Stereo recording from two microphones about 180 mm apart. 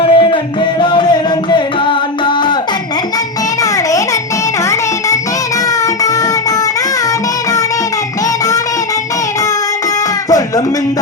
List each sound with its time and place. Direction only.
0.0 s music: 30° left (ahead or behind)